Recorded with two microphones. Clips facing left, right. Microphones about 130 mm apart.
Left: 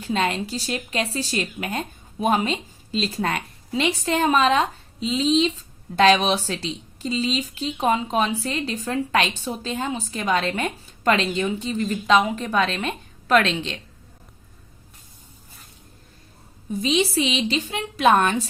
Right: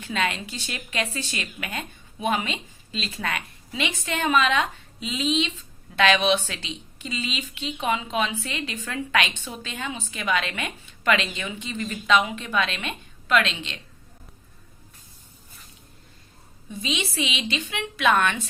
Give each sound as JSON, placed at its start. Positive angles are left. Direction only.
{"t": 0.0, "sound": "a woman's voice", "side_deg": 35}
{"t": 16.6, "sound": "a woman's voice", "side_deg": 40}